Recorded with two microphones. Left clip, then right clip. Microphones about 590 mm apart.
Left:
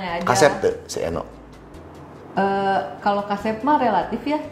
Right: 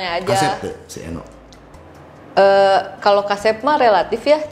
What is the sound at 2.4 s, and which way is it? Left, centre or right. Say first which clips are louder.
A woman's voice: right 9 dB; right.